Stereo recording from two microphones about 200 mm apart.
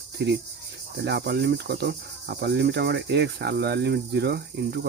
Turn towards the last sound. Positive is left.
turn(degrees=-55)  # may be behind; listen again after turning